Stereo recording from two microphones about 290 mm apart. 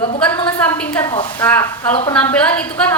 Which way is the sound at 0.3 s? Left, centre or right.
Centre.